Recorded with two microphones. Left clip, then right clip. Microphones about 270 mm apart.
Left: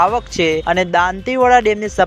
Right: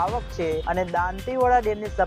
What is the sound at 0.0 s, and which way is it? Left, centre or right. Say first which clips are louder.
Speech: left 11 dB; left.